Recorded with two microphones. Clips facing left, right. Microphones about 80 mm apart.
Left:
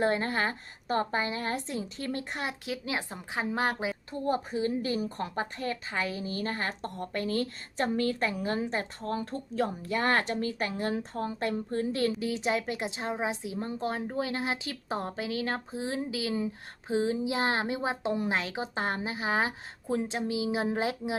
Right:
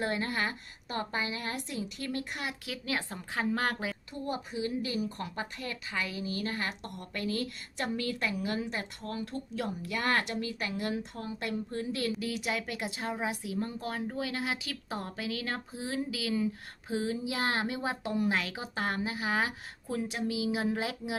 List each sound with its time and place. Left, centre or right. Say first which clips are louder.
0.0 s a woman's voice: left 4 dB; left
4.1 s a woman's voice: left 9 dB; left